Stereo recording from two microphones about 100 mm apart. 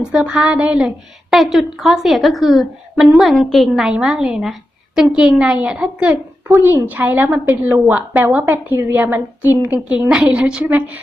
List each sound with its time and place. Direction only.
0.0 s a woman's voice: 5° right (ahead or behind)